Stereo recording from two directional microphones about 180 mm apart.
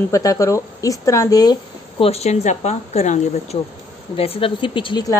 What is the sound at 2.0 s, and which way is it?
A woman's voice, 35° left (ahead or behind).